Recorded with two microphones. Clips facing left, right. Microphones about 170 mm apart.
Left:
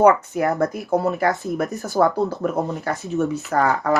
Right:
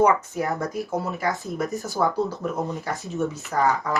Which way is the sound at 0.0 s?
65° left (ahead or behind).